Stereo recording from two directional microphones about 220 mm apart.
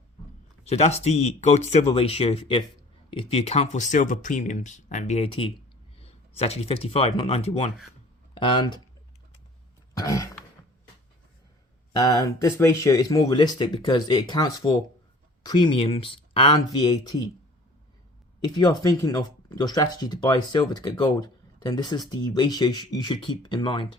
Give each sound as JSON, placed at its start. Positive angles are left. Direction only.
{"t": 0.6, "sound": "speech", "side_deg": 30}
{"t": 10.0, "sound": "throat clearing", "side_deg": 15}
{"t": 11.9, "sound": "speech", "side_deg": 15}
{"t": 18.4, "sound": "speech", "side_deg": 20}